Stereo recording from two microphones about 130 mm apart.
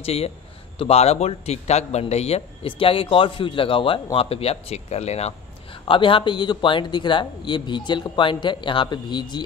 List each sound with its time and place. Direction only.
0.0 s a man's voice: 50° left (ahead or behind)
5.9 s speech: 40° left (ahead or behind)